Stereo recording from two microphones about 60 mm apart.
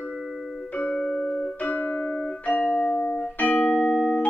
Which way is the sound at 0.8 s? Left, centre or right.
Centre.